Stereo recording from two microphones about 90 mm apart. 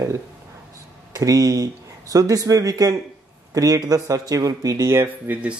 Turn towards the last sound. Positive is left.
turn(degrees=-30)  # may be behind; listen again after turning